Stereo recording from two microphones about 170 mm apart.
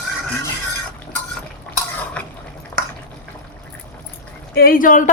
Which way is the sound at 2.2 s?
10° left (ahead or behind).